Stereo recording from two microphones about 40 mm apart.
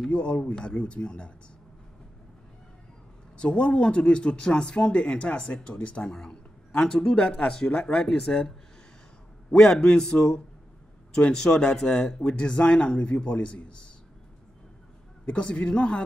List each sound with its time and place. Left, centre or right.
0.1 s speech: left
3.3 s a man's voice: left
15.2 s speech: left